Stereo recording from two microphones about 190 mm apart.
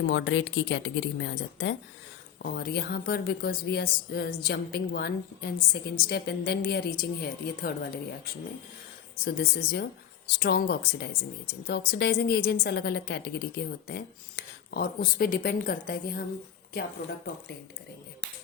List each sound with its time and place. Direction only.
0.0 s a woman's voice: 70° left (ahead or behind)
2.4 s a woman's voice: 55° left (ahead or behind)